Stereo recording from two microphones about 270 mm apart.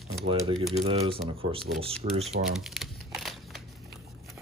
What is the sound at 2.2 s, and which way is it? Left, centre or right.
Crumpling, centre.